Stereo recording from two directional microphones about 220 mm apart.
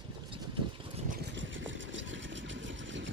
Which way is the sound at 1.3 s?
55° right (ahead or behind).